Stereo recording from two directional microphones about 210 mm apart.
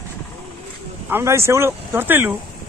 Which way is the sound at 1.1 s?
15° right (ahead or behind).